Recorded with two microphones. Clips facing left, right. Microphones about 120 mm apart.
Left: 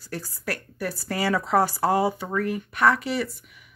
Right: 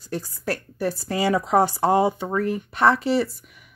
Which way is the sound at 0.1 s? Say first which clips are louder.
Right 4 dB; 25° right (ahead or behind).